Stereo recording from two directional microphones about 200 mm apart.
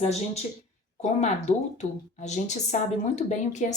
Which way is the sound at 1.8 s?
35° left (ahead or behind).